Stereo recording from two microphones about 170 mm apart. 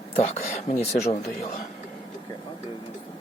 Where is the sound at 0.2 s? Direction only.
40° left (ahead or behind).